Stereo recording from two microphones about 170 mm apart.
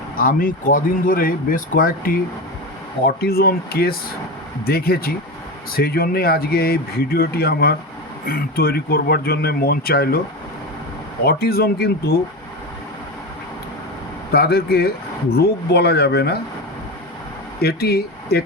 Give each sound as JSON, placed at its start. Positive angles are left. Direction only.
{"t": 0.2, "sound": "speech", "side_deg": 55}
{"t": 11.2, "sound": "speech", "side_deg": 65}
{"t": 14.3, "sound": "speech", "side_deg": 65}
{"t": 17.6, "sound": "speech", "side_deg": 70}